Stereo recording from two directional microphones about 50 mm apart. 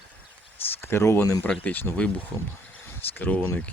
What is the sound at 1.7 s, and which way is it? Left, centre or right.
Speech, left.